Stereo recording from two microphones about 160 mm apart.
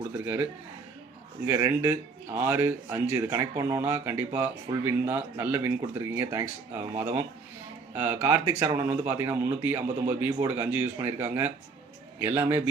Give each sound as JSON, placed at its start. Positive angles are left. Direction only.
{"t": 1.5, "sound": "a man's voice", "side_deg": -20}